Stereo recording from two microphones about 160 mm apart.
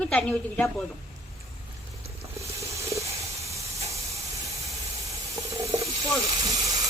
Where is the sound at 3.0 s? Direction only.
40° right (ahead or behind).